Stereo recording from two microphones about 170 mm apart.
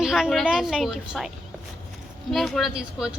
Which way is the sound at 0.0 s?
Centre (ahead or behind).